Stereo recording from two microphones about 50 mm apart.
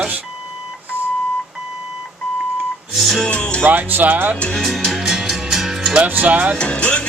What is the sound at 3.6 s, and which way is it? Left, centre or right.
Speech, right.